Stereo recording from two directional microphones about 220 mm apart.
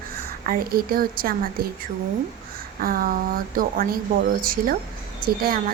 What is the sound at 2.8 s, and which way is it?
Speech, 40° right (ahead or behind).